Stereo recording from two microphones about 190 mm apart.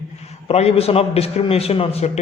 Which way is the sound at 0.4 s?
35° left (ahead or behind).